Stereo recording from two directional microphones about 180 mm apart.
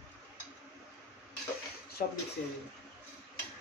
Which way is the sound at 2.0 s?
55° left (ahead or behind).